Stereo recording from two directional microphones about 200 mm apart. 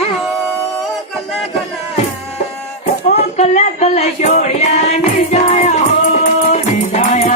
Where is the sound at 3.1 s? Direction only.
35° left (ahead or behind).